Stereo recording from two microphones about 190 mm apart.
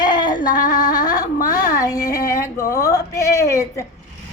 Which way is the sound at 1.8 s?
20° left (ahead or behind).